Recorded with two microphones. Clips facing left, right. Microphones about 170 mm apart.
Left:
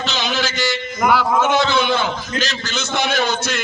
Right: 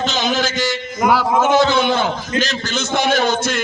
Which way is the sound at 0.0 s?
45° right (ahead or behind).